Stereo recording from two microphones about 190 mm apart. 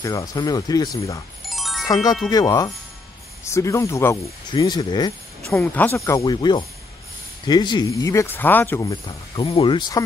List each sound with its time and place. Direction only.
0.0 s speech: 20° left (ahead or behind)
1.5 s music: centre (ahead or behind)
2.2 s speech: 20° left (ahead or behind)
5.5 s speech: 10° left (ahead or behind)
9.0 s speech: 25° left (ahead or behind)